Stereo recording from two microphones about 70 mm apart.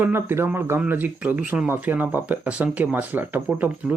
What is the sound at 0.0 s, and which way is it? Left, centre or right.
Speech, right.